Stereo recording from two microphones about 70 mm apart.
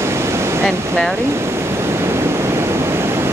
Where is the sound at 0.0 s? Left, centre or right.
Right.